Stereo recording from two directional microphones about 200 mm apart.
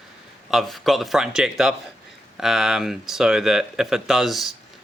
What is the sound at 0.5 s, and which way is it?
Speech, centre (ahead or behind).